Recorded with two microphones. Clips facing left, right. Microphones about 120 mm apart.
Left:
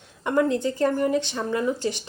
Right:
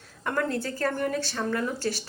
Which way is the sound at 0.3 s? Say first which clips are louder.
Left 6 dB; 15° left (ahead or behind).